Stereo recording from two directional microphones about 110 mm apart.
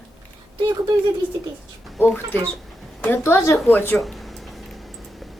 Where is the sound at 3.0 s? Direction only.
20° left (ahead or behind).